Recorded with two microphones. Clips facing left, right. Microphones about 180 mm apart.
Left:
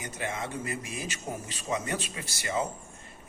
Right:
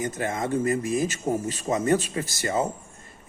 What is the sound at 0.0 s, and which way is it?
A man's voice, 45° right (ahead or behind).